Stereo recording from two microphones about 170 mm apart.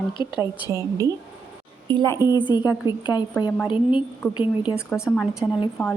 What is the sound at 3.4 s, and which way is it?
Speech, 25° left (ahead or behind).